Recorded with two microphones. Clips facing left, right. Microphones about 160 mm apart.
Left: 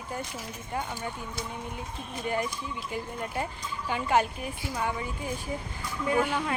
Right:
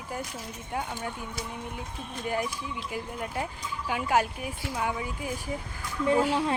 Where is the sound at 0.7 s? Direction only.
Centre (ahead or behind).